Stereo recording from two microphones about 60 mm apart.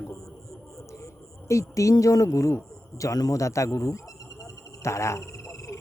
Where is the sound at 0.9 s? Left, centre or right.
Left.